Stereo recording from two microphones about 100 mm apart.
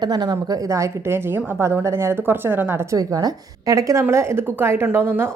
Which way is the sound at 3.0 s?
35° right (ahead or behind).